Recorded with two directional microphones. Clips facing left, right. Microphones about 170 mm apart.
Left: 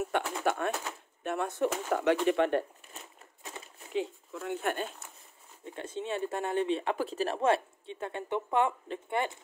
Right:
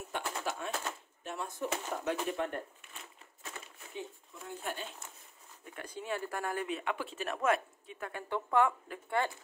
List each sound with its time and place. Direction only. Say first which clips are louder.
0.1 s pigeon: left 7 dB; 60° left (ahead or behind)
1.2 s speech: left 8 dB; 65° left (ahead or behind); by 2.6 s 90° left
3.9 s speech: left 11 dB; 90° left; by 4.9 s 60° left (ahead or behind)
5.7 s speech: left 4 dB; 25° left (ahead or behind)